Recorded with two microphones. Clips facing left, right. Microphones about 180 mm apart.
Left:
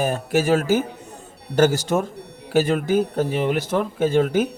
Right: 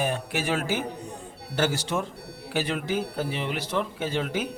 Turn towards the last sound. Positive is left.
turn(degrees=45)  # may be behind; listen again after turning